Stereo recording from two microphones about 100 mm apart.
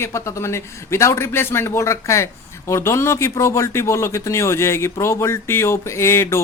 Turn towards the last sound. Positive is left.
turn(degrees=25)  # may be behind; listen again after turning